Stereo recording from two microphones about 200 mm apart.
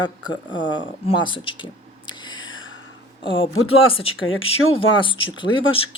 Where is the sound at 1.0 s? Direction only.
25° left (ahead or behind).